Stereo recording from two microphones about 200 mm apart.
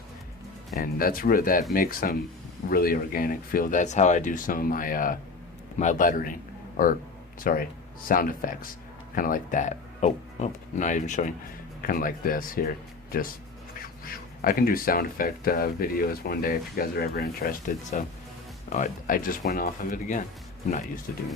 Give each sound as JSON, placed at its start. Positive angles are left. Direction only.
{"t": 0.8, "sound": "speech", "side_deg": 45}